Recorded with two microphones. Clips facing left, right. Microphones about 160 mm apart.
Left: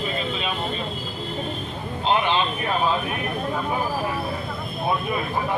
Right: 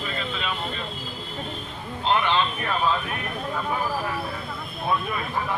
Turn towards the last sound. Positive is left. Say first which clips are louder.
# left 2 dB
turn(degrees=20)  # may be behind; listen again after turning